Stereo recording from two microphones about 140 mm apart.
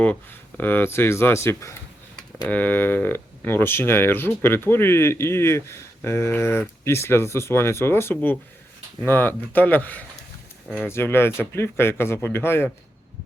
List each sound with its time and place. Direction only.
0.0 s speech: 10° left (ahead or behind)